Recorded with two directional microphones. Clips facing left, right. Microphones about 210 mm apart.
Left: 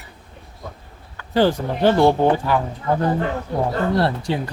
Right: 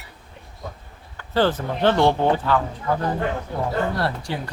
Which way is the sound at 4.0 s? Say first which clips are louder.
Left 5 dB; 25° left (ahead or behind).